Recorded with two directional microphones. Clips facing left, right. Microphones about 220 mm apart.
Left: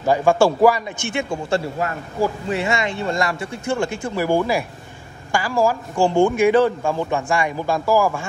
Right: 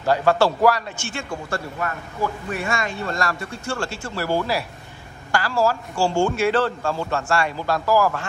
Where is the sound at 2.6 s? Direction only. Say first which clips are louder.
Left 3 dB; 20° left (ahead or behind).